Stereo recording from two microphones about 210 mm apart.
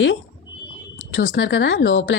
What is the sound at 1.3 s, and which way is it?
Speech, 60° left (ahead or behind).